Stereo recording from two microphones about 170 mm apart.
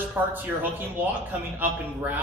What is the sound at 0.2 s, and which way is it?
Speech, 10° right (ahead or behind).